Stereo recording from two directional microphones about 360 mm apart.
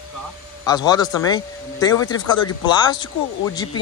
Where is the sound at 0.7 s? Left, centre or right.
Centre.